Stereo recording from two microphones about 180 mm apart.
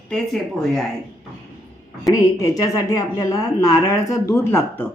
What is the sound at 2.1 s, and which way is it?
A woman's voice, 20° left (ahead or behind).